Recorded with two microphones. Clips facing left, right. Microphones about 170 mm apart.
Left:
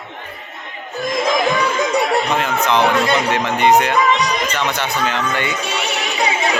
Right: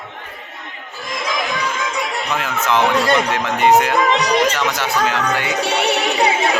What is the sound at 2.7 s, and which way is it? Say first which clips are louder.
Speech: right 1 dB; centre (ahead or behind).